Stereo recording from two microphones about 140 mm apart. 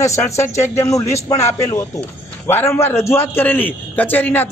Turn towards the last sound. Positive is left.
turn(degrees=15)  # may be behind; listen again after turning